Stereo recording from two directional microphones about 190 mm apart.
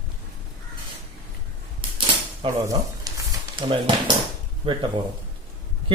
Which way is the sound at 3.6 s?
25° right (ahead or behind).